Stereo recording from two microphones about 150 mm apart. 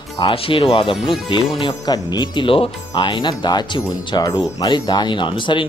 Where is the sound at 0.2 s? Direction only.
35° left (ahead or behind).